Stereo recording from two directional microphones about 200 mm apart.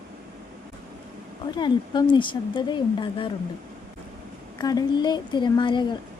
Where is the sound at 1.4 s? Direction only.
20° left (ahead or behind).